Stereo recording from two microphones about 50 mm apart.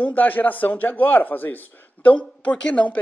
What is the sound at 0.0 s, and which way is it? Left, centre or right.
Speech, left.